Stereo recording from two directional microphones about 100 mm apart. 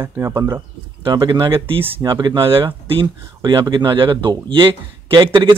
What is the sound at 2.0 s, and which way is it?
Speech, 50° right (ahead or behind).